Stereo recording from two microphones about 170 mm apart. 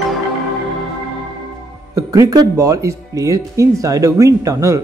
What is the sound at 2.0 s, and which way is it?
Speech, 20° right (ahead or behind).